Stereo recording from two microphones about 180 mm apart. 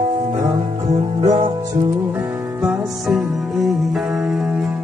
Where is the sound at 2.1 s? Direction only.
5° right (ahead or behind).